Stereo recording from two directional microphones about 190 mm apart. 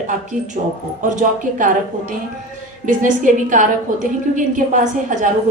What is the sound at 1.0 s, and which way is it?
A woman's voice, 40° right (ahead or behind).